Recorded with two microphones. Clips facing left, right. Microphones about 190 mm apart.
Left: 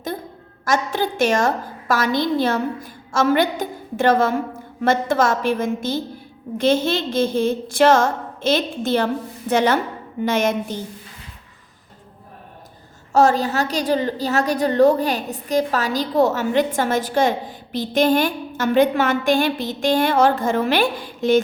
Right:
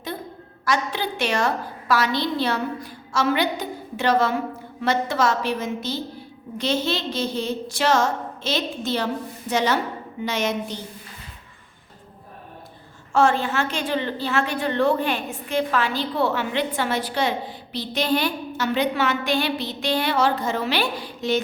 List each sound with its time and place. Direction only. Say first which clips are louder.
0.6 s a woman's voice: left 4 dB; 45° left (ahead or behind)
13.1 s a woman's voice: left 3 dB; 40° left (ahead or behind)